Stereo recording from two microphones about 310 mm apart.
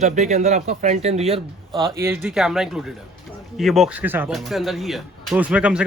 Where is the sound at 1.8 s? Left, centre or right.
Centre.